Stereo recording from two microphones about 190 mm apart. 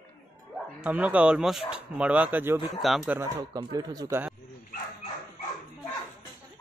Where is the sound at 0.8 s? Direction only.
5° right (ahead or behind).